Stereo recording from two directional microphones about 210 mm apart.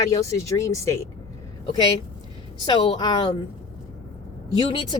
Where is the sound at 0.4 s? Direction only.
15° left (ahead or behind).